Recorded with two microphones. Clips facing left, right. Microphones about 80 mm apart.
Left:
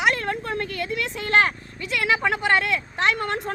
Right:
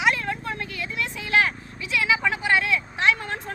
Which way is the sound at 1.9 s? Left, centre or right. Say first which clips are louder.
Left 1 dB; left.